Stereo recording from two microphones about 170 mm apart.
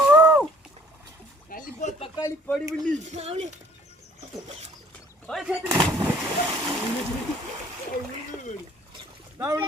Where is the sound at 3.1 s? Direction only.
40° right (ahead or behind).